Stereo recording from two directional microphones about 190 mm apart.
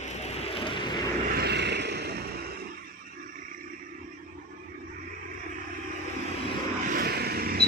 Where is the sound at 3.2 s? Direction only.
45° right (ahead or behind).